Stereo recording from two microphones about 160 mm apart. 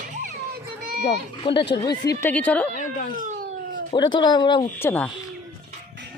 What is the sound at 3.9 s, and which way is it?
Speech, 30° left (ahead or behind).